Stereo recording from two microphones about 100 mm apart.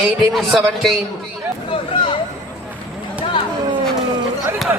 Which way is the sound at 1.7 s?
60° left (ahead or behind).